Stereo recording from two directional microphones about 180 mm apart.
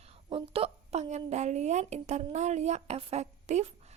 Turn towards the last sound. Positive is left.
turn(degrees=-40)  # may be behind; listen again after turning